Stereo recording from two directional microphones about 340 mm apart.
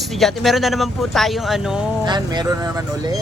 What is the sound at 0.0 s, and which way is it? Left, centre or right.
Speech, centre.